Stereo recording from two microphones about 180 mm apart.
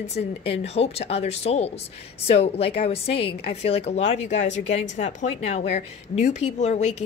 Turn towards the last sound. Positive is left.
turn(degrees=40)  # may be behind; listen again after turning